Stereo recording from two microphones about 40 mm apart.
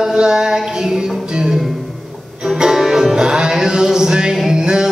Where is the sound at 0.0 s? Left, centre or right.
Centre.